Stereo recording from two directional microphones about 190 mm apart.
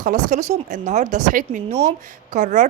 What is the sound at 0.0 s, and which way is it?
Speech, 40° right (ahead or behind).